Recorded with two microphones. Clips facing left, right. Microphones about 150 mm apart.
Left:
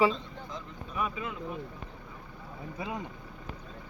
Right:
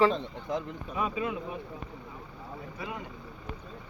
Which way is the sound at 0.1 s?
65° right (ahead or behind).